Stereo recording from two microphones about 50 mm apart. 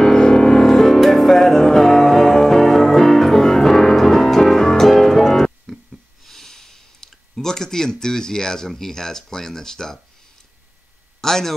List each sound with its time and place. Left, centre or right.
0.0 s music: centre
6.2 s speech: centre
11.1 s a man's voice: centre